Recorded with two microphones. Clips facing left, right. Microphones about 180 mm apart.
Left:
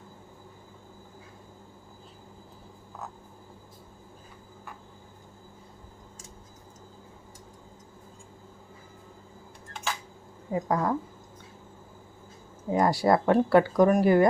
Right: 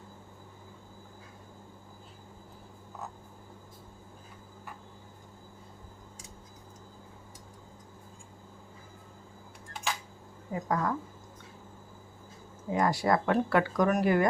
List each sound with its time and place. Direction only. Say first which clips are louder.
10.5 s speech: left 4 dB; 30° left (ahead or behind)
12.7 s speech: left 4 dB; 35° left (ahead or behind)